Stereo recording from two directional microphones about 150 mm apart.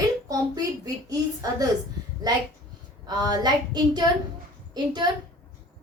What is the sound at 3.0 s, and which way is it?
A woman's voice, 30° right (ahead or behind).